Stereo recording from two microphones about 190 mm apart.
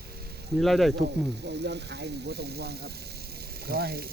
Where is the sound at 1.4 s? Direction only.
65° right (ahead or behind).